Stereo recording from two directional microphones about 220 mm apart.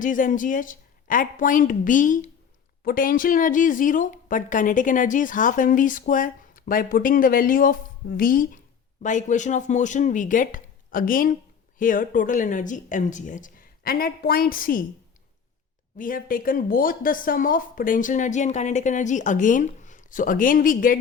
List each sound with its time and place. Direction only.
0.0 s speech: 35° left (ahead or behind)
16.0 s speech: 40° left (ahead or behind)